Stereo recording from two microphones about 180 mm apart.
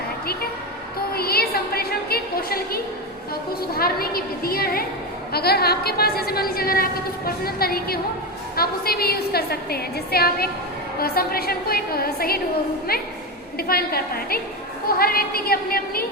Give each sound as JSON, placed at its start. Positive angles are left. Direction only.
{"t": 1.1, "sound": "a woman's voice", "side_deg": 60}